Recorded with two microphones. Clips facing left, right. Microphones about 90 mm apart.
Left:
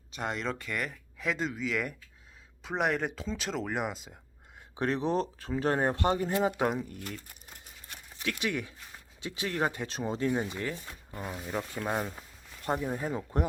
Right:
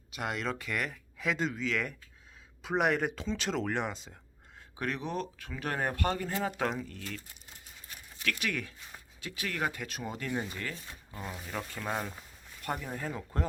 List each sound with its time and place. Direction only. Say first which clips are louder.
0.1 s speech: left 1 dB; 5° right (ahead or behind)
4.8 s speech: left 6 dB; 30° left (ahead or behind); by 7.0 s 15° left (ahead or behind)
8.2 s speech: left 2 dB; 20° left (ahead or behind)